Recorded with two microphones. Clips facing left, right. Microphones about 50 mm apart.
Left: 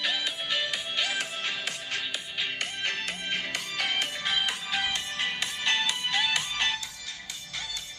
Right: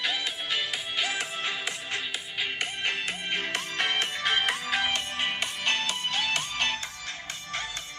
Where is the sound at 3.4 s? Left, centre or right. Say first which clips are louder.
Right 2 dB; right.